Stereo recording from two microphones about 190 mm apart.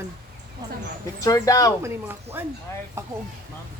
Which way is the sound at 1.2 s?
20° left (ahead or behind).